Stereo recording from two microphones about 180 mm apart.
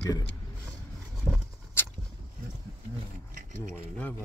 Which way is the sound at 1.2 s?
10° left (ahead or behind).